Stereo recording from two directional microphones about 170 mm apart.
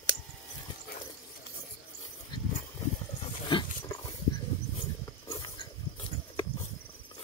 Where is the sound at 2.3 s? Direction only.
30° left (ahead or behind).